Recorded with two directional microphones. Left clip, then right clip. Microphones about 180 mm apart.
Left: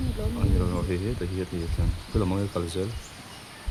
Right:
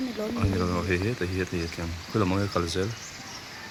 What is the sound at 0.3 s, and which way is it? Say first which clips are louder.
Speech: right 1 dB; 5° right (ahead or behind).